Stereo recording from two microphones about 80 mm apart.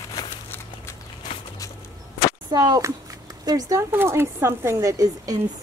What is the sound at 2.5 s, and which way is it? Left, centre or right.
Speech, right.